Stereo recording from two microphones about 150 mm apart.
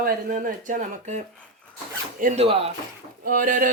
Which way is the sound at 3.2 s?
70° right (ahead or behind).